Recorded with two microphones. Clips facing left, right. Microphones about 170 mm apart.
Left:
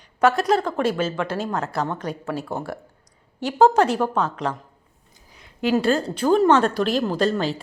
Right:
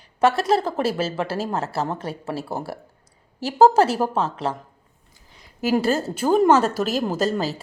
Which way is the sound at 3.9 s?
35° right (ahead or behind).